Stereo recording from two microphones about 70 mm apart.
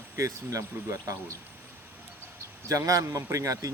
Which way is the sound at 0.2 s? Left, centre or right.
Right.